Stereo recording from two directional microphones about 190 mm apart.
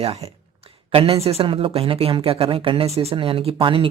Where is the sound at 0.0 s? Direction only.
30° right (ahead or behind).